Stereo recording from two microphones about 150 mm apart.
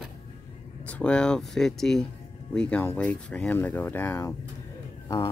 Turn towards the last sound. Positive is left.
turn(degrees=25)  # may be behind; listen again after turning